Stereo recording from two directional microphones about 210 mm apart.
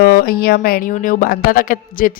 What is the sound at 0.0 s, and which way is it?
A woman's voice, 45° left (ahead or behind).